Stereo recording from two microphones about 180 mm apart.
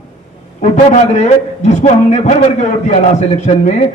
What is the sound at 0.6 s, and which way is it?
A man's voice, 40° left (ahead or behind).